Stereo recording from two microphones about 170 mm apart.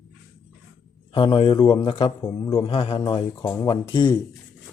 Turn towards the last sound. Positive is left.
turn(degrees=25)  # may be behind; listen again after turning